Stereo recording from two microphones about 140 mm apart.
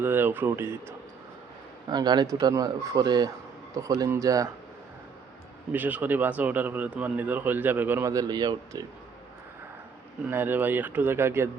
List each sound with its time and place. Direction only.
0.0 s a man's voice: 15° right (ahead or behind)
1.9 s speech: 30° right (ahead or behind)
5.7 s a man's voice: 10° right (ahead or behind); by 8.8 s 30° right (ahead or behind)
10.2 s a man's voice: 15° right (ahead or behind)